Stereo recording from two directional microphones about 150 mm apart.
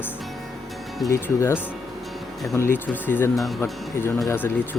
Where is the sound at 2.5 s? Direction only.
15° left (ahead or behind).